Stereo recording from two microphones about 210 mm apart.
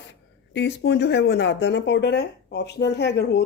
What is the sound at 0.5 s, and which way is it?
Speech, 55° left (ahead or behind).